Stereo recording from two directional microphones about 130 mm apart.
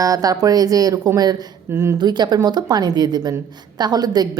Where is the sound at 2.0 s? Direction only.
35° right (ahead or behind).